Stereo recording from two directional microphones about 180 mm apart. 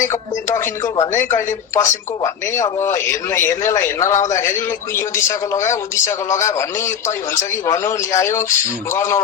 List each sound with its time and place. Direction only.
0.5 s speech: 15° left (ahead or behind)
1.1 s speech: 45° left (ahead or behind)
1.4 s speech: 15° left (ahead or behind)